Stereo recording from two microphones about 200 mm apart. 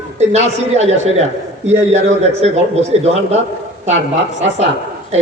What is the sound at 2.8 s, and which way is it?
Speech, 35° right (ahead or behind).